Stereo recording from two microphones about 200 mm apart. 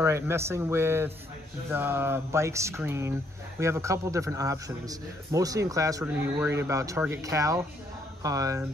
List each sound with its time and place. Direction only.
0.0 s speech: 10° right (ahead or behind)